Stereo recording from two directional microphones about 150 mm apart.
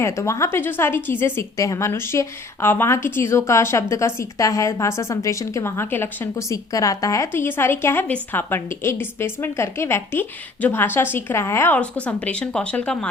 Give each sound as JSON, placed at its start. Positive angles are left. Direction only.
{"t": 0.0, "sound": "a woman's voice", "side_deg": 20}